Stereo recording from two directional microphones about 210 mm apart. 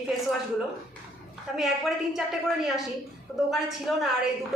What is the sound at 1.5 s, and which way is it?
Speech, centre (ahead or behind).